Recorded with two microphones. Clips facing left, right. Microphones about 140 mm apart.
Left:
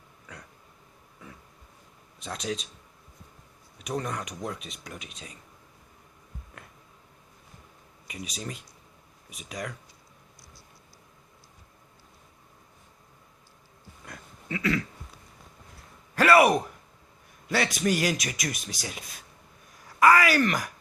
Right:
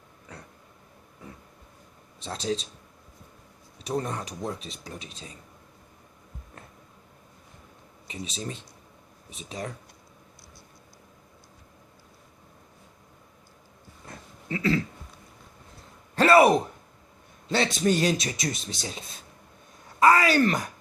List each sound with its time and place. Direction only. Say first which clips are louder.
2.1 s speech: right 3 dB; 30° right (ahead or behind)
3.8 s speech: right 2 dB; 30° right (ahead or behind)
8.0 s speech: right 2 dB; 30° right (ahead or behind)
14.0 s a sound: right 1 dB; 35° right (ahead or behind)
16.1 s a sound: right 2 dB; 25° right (ahead or behind)
17.5 s speech: right 2 dB; 25° right (ahead or behind)